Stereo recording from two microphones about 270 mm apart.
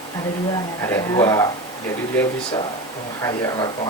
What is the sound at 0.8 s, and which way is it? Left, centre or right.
Speech, centre.